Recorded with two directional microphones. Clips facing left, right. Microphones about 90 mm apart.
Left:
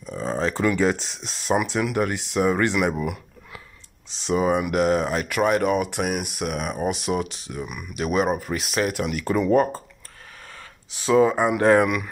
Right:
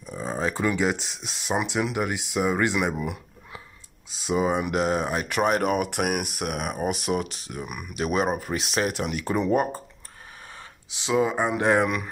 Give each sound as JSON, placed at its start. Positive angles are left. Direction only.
{"t": 0.0, "sound": "a sound", "side_deg": -10}
{"t": 0.7, "sound": "speech", "side_deg": -15}
{"t": 4.1, "sound": "speech", "side_deg": -10}
{"t": 4.5, "sound": "speech", "side_deg": -30}
{"t": 5.2, "sound": "speech", "side_deg": -35}
{"t": 8.0, "sound": "speech", "side_deg": -35}
{"t": 9.2, "sound": "speech", "side_deg": -20}
{"t": 10.9, "sound": "speech", "side_deg": -20}